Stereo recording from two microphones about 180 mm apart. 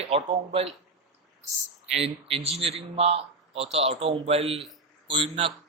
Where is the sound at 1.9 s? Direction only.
35° right (ahead or behind).